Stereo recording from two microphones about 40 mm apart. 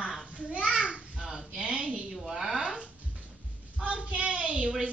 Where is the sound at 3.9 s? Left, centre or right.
Right.